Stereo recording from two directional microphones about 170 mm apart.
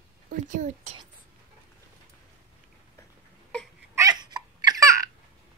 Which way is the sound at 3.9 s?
20° right (ahead or behind).